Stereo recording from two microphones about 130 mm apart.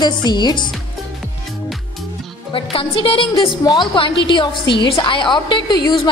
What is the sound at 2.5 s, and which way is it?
A woman's voice, 45° left (ahead or behind).